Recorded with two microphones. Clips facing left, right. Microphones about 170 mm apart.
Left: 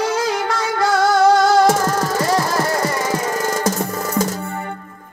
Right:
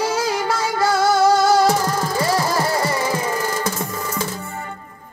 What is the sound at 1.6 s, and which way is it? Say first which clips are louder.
Music: left 2 dB; 45° left (ahead or behind).